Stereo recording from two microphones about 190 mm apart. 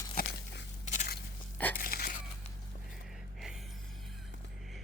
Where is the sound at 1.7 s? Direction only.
50° left (ahead or behind).